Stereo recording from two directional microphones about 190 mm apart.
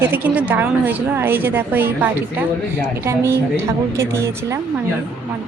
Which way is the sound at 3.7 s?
15° right (ahead or behind).